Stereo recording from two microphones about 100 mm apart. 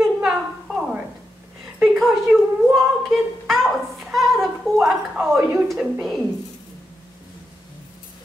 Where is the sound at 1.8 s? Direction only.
5° right (ahead or behind).